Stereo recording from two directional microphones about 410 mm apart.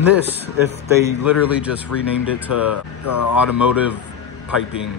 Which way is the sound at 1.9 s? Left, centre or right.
Left.